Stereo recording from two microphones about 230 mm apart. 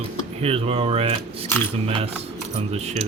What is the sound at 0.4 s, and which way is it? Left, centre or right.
Speech, right.